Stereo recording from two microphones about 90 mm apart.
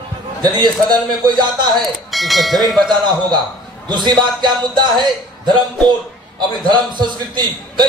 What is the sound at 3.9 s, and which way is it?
A man's voice, 55° right (ahead or behind).